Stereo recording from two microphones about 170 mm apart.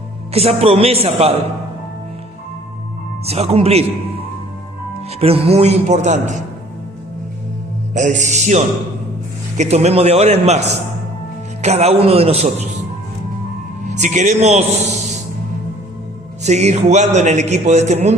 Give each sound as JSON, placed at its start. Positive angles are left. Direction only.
{"t": 0.3, "sound": "a man's voice", "side_deg": -35}
{"t": 3.2, "sound": "a man's voice", "side_deg": -40}
{"t": 5.2, "sound": "a man's voice", "side_deg": -35}
{"t": 7.9, "sound": "a man's voice", "side_deg": -45}
{"t": 11.6, "sound": "a man's voice", "side_deg": -40}
{"t": 13.9, "sound": "a man's voice", "side_deg": -45}
{"t": 16.4, "sound": "a man's voice", "side_deg": -40}